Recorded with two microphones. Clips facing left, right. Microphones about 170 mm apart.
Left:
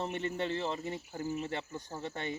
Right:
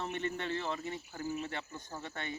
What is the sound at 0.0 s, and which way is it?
Speech, 30° left (ahead or behind).